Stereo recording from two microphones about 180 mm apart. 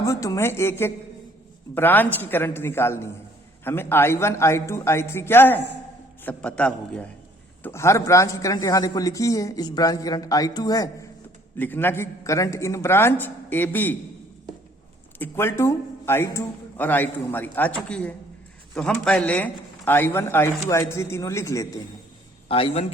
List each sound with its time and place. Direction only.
0.0 s a man's voice: 20° left (ahead or behind)
11.5 s a man's voice: 10° left (ahead or behind)
15.2 s a man's voice: 15° left (ahead or behind)
22.4 s speech: 30° left (ahead or behind)